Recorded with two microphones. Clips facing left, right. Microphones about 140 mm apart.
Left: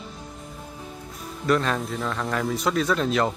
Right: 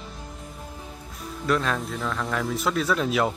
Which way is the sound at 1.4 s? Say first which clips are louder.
Left 2 dB; centre (ahead or behind).